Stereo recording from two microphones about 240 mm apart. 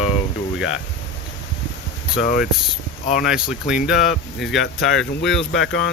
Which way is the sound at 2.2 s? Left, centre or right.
Left.